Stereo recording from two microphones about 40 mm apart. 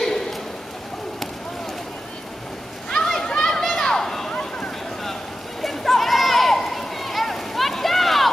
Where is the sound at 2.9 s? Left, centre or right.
Centre.